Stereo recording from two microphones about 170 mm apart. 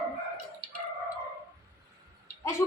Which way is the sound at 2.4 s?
15° left (ahead or behind).